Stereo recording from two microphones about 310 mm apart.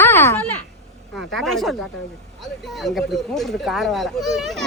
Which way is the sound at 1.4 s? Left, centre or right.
Centre.